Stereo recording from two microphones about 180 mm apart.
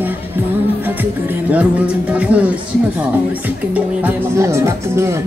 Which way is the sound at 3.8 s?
10° right (ahead or behind).